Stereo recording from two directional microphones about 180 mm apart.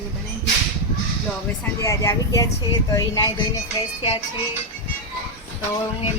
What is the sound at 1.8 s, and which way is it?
Speech, 15° left (ahead or behind).